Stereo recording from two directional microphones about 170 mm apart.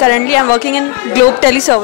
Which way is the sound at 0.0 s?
10° left (ahead or behind).